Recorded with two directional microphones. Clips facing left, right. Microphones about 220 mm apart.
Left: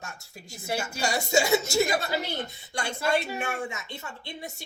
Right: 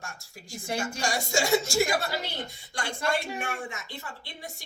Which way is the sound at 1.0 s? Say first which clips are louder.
Left 4 dB; 25° left (ahead or behind).